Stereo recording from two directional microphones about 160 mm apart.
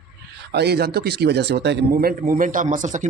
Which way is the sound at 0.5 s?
90° right.